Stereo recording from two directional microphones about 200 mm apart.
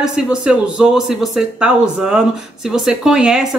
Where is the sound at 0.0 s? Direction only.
5° right (ahead or behind).